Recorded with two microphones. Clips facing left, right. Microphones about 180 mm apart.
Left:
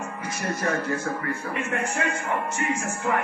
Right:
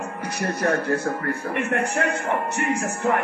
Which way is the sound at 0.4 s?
65° right (ahead or behind).